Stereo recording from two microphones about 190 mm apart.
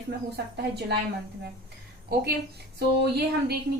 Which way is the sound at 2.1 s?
55° right (ahead or behind).